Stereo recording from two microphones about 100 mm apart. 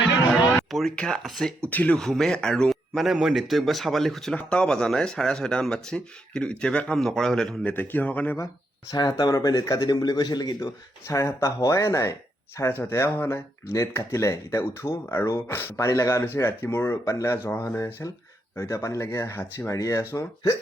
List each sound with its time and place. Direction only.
0.3 s speech: centre (ahead or behind)
1.7 s speech: 15° left (ahead or behind)
8.9 s speech: 40° left (ahead or behind)
11.0 s speech: 30° left (ahead or behind)